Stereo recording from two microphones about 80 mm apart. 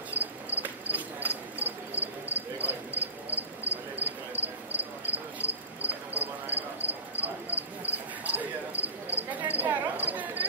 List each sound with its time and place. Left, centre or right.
0.1 s cricket: right